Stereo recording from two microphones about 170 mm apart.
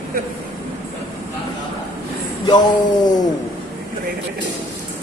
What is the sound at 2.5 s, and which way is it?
Speech, 25° left (ahead or behind).